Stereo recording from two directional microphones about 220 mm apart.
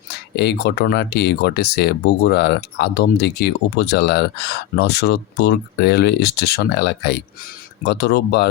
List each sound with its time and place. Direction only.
0.3 s speech: 50° left (ahead or behind)